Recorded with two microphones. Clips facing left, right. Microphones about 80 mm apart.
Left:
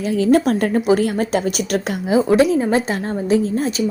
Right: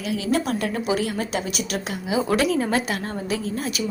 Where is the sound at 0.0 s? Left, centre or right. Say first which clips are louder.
Left 8 dB; left.